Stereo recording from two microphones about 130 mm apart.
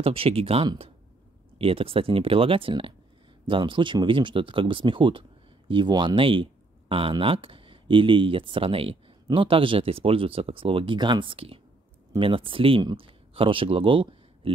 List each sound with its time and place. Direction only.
0.0 s speech: 45° right (ahead or behind)